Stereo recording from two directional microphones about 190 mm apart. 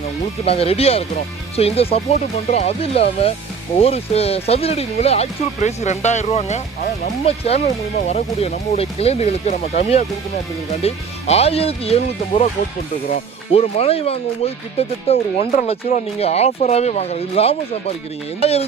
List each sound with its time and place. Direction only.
0.4 s speech: 30° left (ahead or behind)